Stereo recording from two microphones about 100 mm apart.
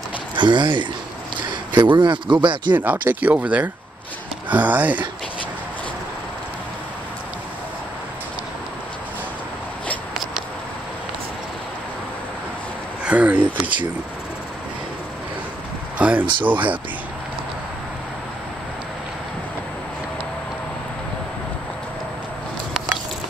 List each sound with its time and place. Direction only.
0.4 s speech: 50° right (ahead or behind)
2.7 s speech: 15° right (ahead or behind)
13.0 s speech: 15° right (ahead or behind)
16.0 s speech: 15° right (ahead or behind)